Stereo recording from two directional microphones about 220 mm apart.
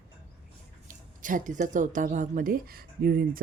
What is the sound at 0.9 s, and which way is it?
A woman's voice, 35° right (ahead or behind).